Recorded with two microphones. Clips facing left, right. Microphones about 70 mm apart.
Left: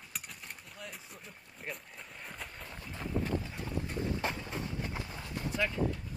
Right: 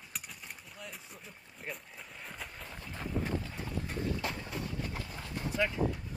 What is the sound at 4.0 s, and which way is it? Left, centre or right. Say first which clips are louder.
Boat: left 1 dB; left.